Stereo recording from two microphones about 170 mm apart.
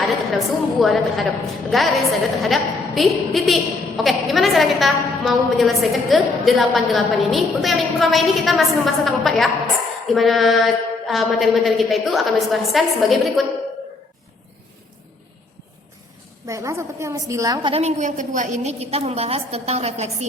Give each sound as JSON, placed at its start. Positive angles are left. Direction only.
{"t": 0.0, "sound": "a woman's voice", "side_deg": 0}
{"t": 16.5, "sound": "a woman's voice", "side_deg": -15}